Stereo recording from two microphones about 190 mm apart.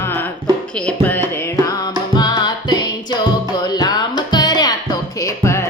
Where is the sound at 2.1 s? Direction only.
20° left (ahead or behind).